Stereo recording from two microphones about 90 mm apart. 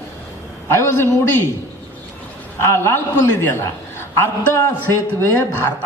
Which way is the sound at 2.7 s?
30° left (ahead or behind).